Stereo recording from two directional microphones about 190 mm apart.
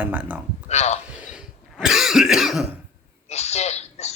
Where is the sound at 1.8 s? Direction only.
Centre (ahead or behind).